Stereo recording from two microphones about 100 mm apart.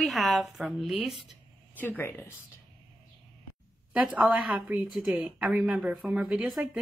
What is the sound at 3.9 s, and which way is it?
A woman's voice, 10° right (ahead or behind).